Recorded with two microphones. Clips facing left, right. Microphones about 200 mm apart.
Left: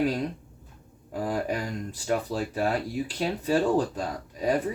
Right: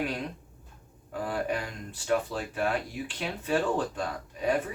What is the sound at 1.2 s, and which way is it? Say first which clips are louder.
Speech: left 2 dB; 40° left (ahead or behind).